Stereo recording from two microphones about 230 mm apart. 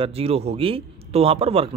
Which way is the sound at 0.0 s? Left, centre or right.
Right.